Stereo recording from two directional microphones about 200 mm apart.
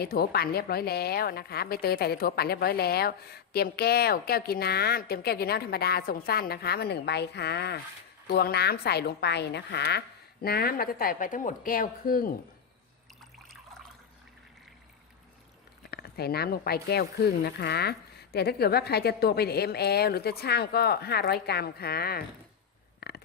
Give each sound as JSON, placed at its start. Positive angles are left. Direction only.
{"t": 0.0, "sound": "a woman's voice", "side_deg": 50}
{"t": 15.9, "sound": "a woman's voice", "side_deg": 50}
{"t": 23.0, "sound": "a sound", "side_deg": 50}